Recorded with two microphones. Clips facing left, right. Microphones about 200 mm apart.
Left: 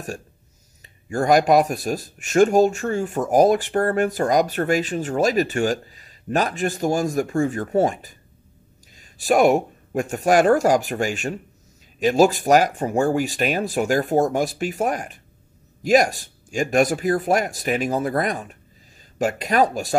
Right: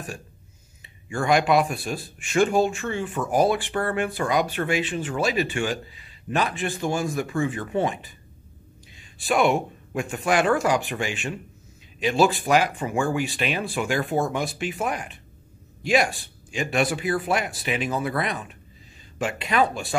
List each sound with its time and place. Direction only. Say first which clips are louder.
0.8 s speech: left 4 dB; 40° left (ahead or behind)